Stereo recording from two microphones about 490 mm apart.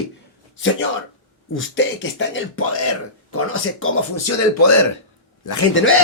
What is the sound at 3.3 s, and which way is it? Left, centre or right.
Speech, left.